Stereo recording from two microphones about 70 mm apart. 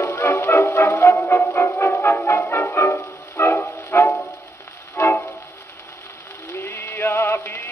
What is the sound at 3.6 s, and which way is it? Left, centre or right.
Music, left.